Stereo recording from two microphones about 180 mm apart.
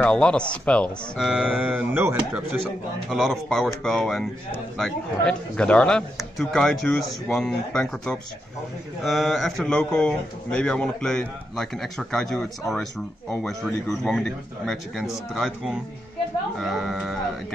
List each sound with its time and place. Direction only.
0.0 s speech: 5° left (ahead or behind)